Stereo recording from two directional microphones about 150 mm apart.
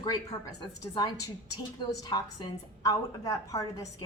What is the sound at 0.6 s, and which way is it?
A woman's voice, 30° left (ahead or behind).